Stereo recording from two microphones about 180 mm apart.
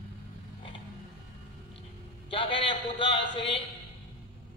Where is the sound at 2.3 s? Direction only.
30° left (ahead or behind).